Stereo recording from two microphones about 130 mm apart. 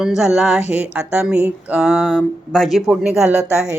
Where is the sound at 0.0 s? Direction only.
5° right (ahead or behind).